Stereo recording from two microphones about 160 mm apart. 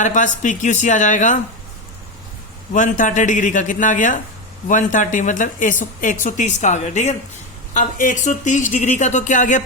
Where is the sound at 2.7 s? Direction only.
50° left (ahead or behind).